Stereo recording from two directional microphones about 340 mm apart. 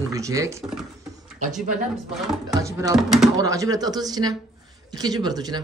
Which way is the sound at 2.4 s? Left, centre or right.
Centre.